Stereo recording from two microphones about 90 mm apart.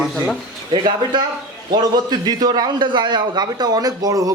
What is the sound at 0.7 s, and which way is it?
A man's voice, 60° right (ahead or behind).